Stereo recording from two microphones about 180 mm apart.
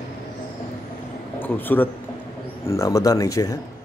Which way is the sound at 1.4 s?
10° left (ahead or behind).